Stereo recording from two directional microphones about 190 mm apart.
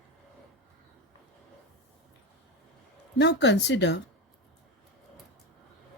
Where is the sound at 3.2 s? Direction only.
70° left (ahead or behind).